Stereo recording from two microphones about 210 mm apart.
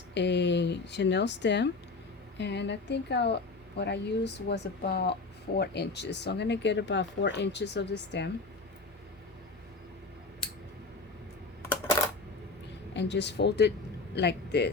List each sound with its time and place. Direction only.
0.1 s speech: 55° left (ahead or behind)
12.9 s speech: 55° left (ahead or behind)